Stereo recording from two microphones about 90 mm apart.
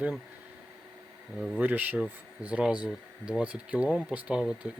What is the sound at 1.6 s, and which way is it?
Speech, 20° right (ahead or behind).